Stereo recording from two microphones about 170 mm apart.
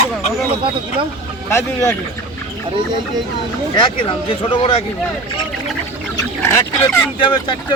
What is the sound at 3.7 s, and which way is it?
Speech, 30° left (ahead or behind).